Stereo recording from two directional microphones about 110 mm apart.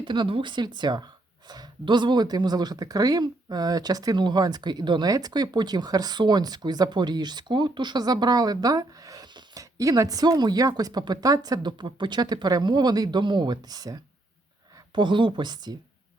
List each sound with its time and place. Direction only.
0.0 s speech: 45° right (ahead or behind)
14.9 s speech: 45° right (ahead or behind)